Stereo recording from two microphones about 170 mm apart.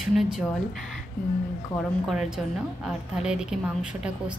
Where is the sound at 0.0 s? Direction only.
Centre (ahead or behind).